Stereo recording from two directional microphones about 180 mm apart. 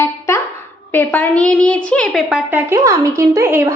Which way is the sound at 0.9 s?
10° left (ahead or behind).